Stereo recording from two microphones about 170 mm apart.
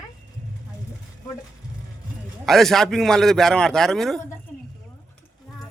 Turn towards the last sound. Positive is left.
turn(degrees=0)  # may be behind; listen again after turning